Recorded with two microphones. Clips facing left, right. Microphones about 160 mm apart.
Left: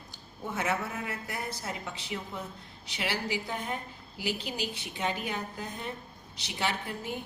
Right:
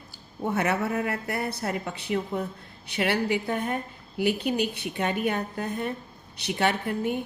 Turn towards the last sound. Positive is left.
turn(degrees=-60)  # may be behind; listen again after turning